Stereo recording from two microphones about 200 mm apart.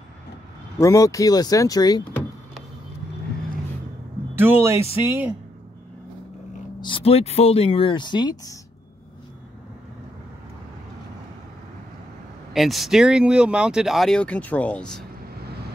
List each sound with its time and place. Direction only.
0.7 s speech: 15° left (ahead or behind)
4.4 s speech: 10° right (ahead or behind)
6.8 s speech: 25° left (ahead or behind)
12.5 s speech: centre (ahead or behind)